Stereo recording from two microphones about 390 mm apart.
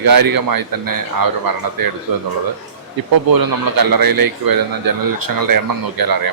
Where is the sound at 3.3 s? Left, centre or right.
Right.